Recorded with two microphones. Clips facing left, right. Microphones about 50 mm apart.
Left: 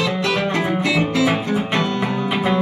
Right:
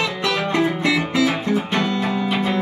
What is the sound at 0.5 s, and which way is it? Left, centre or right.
Music, left.